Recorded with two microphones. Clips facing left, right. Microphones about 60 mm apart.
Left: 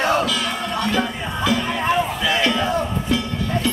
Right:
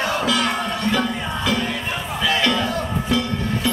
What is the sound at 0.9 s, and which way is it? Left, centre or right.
Music, centre.